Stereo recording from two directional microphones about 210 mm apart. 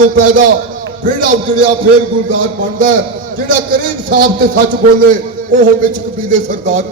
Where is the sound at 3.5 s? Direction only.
40° right (ahead or behind).